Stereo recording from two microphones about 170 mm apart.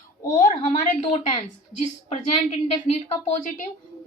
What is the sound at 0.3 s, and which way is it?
Speech, 50° left (ahead or behind).